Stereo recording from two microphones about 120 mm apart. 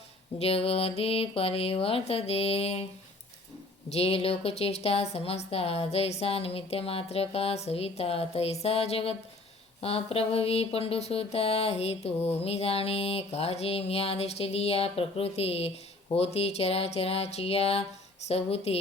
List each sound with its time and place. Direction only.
0.3 s speech: 55° left (ahead or behind)
3.9 s speech: 55° left (ahead or behind)